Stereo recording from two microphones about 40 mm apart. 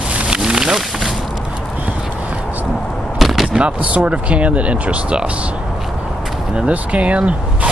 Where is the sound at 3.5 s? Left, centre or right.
Right.